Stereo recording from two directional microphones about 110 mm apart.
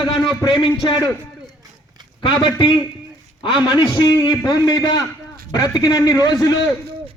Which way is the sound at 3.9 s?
40° left (ahead or behind).